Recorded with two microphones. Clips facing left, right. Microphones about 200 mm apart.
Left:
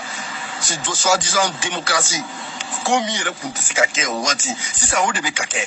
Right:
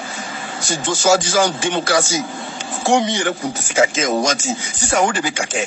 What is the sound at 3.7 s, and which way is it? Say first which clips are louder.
Speech: right 5 dB; 45° right (ahead or behind).